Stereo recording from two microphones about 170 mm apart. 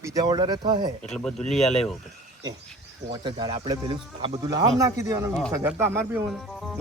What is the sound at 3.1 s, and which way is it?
Speech, 25° right (ahead or behind).